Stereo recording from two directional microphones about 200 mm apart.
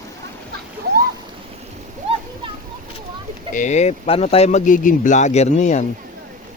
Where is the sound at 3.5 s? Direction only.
35° left (ahead or behind).